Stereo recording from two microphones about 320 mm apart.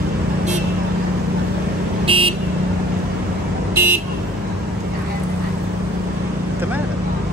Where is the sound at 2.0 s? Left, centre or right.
Centre.